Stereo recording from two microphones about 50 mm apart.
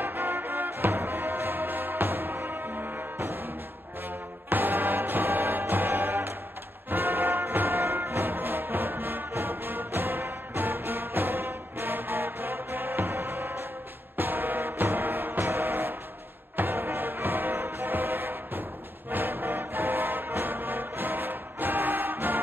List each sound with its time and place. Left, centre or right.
0.0 s music: right
4.5 s music: right